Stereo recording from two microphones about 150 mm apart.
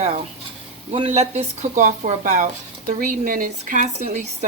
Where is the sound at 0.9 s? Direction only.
45° right (ahead or behind).